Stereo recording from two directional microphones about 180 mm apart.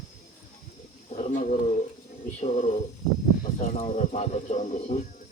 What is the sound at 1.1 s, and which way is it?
Speech, 40° left (ahead or behind).